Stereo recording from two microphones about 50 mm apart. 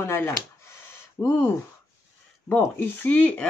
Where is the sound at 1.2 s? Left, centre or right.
Left.